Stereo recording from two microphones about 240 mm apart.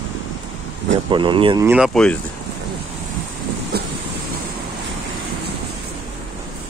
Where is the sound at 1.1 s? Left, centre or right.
Centre.